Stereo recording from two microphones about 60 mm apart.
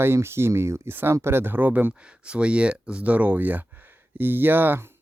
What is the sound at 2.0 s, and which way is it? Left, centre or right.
Speech, centre.